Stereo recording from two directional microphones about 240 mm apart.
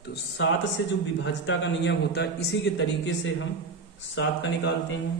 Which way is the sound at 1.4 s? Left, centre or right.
Left.